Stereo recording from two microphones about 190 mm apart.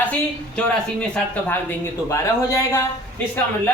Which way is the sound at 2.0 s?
15° left (ahead or behind).